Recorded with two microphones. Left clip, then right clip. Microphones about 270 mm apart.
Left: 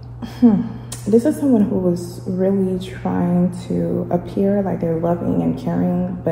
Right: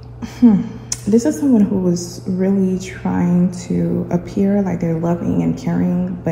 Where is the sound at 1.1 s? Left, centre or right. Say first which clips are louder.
Even; centre.